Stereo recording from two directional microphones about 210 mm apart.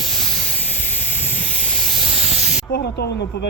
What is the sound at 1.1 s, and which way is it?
Hiss, 10° left (ahead or behind).